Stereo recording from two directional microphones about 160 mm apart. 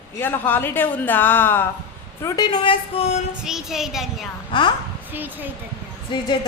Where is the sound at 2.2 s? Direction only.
25° left (ahead or behind).